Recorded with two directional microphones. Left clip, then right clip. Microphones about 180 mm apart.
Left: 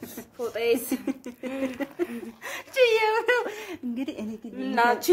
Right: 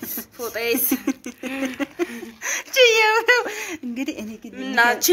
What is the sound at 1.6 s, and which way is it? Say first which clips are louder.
Speech: right 4 dB; 25° right (ahead or behind).